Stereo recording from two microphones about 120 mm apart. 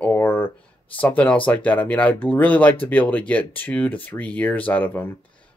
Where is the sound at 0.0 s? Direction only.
15° left (ahead or behind).